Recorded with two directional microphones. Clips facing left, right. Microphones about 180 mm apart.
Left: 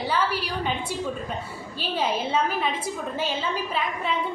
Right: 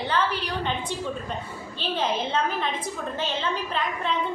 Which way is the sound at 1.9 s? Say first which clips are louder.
Left 1 dB; 10° left (ahead or behind).